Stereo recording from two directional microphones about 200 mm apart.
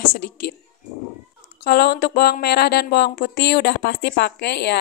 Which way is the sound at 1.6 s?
50° left (ahead or behind).